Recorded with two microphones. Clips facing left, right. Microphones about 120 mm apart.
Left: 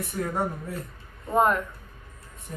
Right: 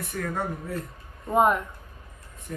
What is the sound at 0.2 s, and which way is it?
Speech, 25° left (ahead or behind).